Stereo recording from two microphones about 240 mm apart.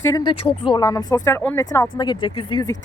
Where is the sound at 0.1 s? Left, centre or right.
Centre.